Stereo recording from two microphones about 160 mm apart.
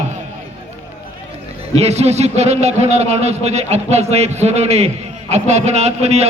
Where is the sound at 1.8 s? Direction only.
40° right (ahead or behind).